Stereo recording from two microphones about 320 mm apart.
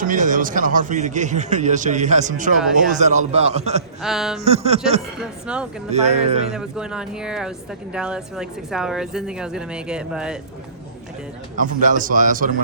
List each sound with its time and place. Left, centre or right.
0.0 s a man's voice: right
4.0 s speech: centre
4.4 s a man's voice: centre
5.5 s speech: centre
5.9 s a man's voice: right
6.5 s speech: centre
11.5 s a man's voice: right